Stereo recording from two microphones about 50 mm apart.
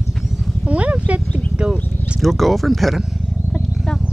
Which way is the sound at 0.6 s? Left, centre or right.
Right.